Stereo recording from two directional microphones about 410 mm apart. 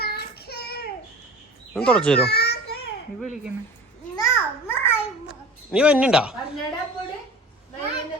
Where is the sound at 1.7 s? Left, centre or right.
Centre.